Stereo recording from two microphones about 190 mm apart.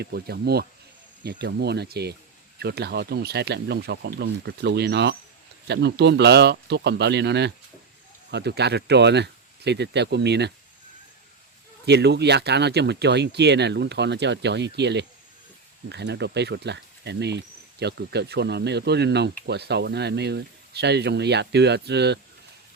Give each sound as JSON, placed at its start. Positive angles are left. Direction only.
{"t": 0.0, "sound": "speech", "side_deg": -55}
{"t": 11.9, "sound": "speech", "side_deg": -60}